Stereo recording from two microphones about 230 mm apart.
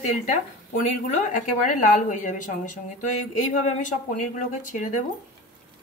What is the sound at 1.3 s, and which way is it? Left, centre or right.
A woman's voice, left.